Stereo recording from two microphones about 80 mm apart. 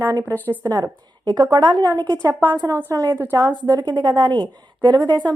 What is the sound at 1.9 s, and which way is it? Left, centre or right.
Speech, right.